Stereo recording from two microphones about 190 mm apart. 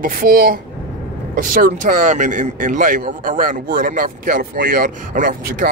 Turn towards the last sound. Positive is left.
turn(degrees=-45)  # may be behind; listen again after turning